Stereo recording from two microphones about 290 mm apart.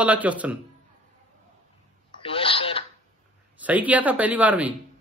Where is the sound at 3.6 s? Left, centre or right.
Centre.